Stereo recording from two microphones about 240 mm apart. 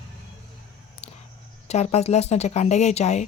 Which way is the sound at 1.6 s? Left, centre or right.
Left.